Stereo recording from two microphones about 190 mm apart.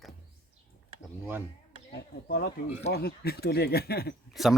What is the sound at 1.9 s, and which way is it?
Speech, 55° left (ahead or behind).